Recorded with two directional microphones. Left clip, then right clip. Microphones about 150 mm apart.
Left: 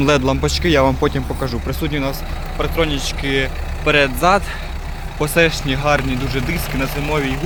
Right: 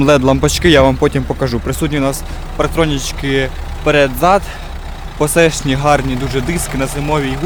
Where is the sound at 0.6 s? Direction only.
75° right (ahead or behind); by 3.5 s 90° right.